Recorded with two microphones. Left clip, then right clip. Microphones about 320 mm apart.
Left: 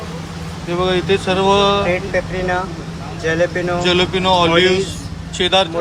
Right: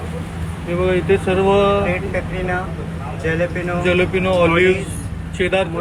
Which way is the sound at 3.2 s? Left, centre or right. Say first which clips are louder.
Left 4 dB; left.